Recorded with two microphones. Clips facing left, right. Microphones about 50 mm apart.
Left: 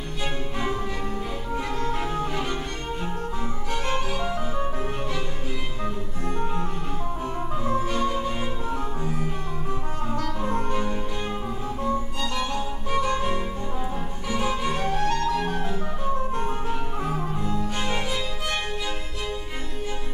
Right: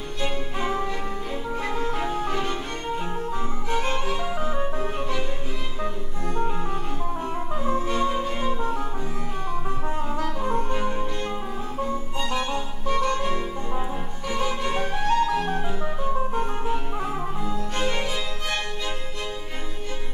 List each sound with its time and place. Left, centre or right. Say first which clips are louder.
0.2 s music: right 1 dB; centre
4.1 s music: right 1 dB; centre
7.6 s music: even; centre
7.9 s music: right 1 dB; centre
10.4 s music: right 1 dB; centre
12.2 s music: right 1 dB; centre
12.8 s music: right 1 dB; centre
14.3 s violin: left 1 dB; centre
14.7 s music: right 1 dB; centre